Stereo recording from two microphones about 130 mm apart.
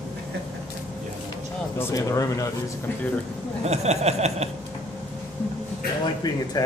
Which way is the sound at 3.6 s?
55° right (ahead or behind).